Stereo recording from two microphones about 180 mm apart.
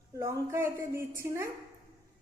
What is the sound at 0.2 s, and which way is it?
A woman's voice, 15° right (ahead or behind).